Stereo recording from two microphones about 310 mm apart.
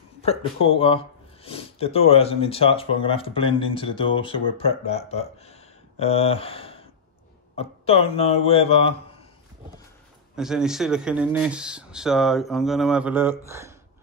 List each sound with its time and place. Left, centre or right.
0.2 s speech: centre
10.3 s speech: centre